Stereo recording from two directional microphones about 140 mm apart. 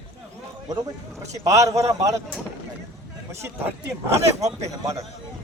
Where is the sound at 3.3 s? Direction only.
20° right (ahead or behind).